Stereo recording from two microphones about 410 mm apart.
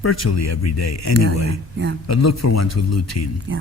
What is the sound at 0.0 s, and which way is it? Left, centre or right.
A man's voice, left.